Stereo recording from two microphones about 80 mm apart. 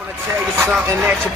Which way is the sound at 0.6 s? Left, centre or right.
Centre.